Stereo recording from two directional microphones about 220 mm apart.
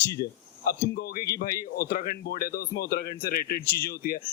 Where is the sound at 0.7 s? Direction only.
45° left (ahead or behind).